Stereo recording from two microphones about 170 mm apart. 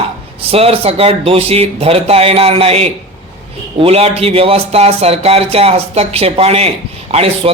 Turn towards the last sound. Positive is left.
turn(degrees=-35)  # may be behind; listen again after turning